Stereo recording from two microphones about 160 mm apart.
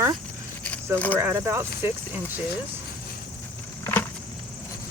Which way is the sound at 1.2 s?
15° right (ahead or behind).